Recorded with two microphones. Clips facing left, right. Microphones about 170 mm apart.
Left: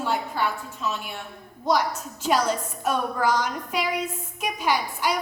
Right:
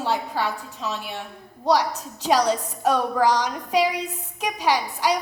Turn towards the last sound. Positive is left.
turn(degrees=-35)  # may be behind; listen again after turning